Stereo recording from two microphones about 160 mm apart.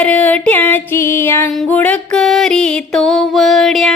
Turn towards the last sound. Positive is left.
turn(degrees=0)  # may be behind; listen again after turning